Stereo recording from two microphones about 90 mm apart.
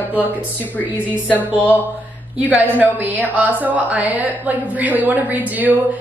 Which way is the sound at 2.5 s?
20° right (ahead or behind).